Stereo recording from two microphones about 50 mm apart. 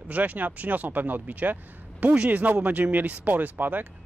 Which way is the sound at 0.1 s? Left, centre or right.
Right.